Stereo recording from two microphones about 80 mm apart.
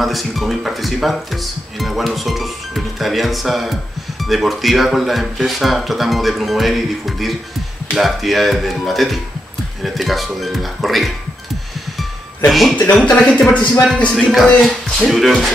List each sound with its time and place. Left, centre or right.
0.0 s speech: centre
12.4 s speech: centre
12.7 s speech: centre
13.2 s speech: centre
13.5 s speech: centre
14.1 s speech: centre
15.0 s speech: centre